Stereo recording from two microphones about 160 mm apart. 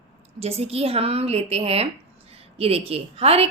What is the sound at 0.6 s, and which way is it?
A woman's voice, 40° right (ahead or behind).